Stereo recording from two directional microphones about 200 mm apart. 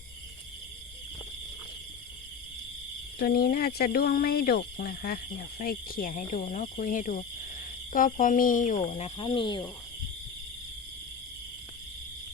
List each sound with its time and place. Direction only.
3.2 s speech: 50° left (ahead or behind); by 9.6 s 25° left (ahead or behind)